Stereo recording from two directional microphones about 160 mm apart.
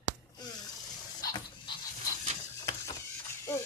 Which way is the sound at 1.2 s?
25° left (ahead or behind).